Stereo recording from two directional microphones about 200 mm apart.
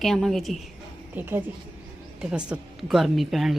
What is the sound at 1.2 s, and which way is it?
A woman's voice, 10° right (ahead or behind).